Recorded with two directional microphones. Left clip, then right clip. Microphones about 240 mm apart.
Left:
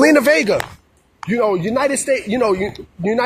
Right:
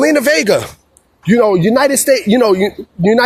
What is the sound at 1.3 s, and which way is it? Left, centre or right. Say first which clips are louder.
Speech: right 7 dB; right.